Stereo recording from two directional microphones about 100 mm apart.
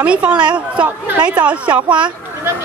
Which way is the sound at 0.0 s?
10° right (ahead or behind).